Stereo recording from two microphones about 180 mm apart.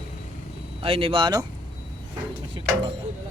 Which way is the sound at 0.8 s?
30° right (ahead or behind).